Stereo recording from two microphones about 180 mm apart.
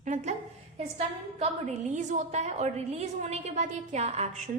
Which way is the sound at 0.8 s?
35° right (ahead or behind).